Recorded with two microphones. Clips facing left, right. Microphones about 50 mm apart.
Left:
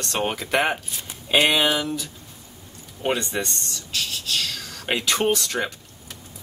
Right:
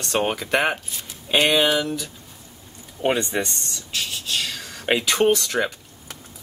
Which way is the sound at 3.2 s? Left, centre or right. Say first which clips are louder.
Right 2 dB; centre.